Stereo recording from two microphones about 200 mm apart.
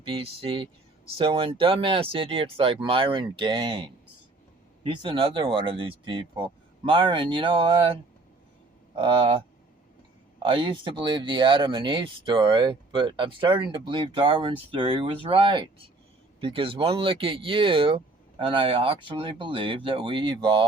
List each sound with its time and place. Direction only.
0.0 s speech: 25° right (ahead or behind)
9.0 s speech: 25° right (ahead or behind)
10.4 s speech: 25° right (ahead or behind)